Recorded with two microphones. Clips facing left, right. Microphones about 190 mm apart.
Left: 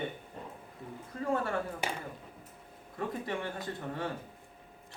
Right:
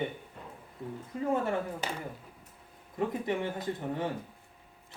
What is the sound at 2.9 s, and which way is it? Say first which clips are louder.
A man's voice: right 4 dB; 15° right (ahead or behind).